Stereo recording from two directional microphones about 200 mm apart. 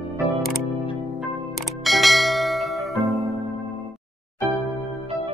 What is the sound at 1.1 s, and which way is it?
Bell, centre (ahead or behind).